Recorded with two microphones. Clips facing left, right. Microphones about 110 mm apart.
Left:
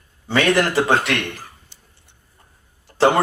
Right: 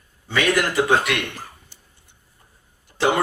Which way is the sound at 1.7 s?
20° left (ahead or behind).